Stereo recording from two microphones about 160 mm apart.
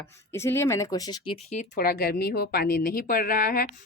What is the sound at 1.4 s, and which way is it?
Speech, 45° left (ahead or behind).